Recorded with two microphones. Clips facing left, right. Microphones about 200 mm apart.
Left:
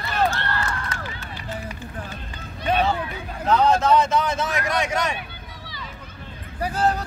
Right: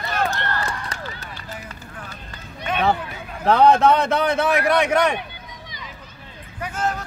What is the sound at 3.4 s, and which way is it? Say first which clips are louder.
A man's voice: right 4 dB; 60° right (ahead or behind).